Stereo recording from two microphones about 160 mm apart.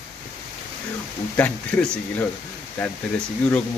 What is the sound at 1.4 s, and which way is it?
Speech, 10° left (ahead or behind).